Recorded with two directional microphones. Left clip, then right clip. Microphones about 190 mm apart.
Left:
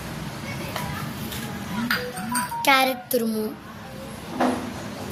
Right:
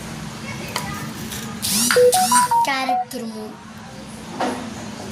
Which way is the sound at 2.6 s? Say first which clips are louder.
Left 2 dB; 60° left (ahead or behind).